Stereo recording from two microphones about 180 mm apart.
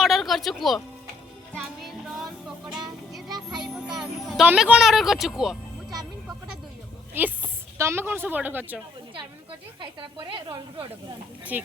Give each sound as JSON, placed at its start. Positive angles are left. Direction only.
{"t": 0.0, "sound": "music", "side_deg": 0}
{"t": 3.2, "sound": "music", "side_deg": -25}
{"t": 3.6, "sound": "speech", "side_deg": 0}
{"t": 7.1, "sound": "speech", "side_deg": -10}
{"t": 9.8, "sound": "speech", "side_deg": -30}
{"t": 11.5, "sound": "speech", "side_deg": -10}